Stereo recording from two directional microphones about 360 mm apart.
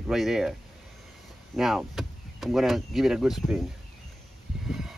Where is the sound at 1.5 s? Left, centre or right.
Centre.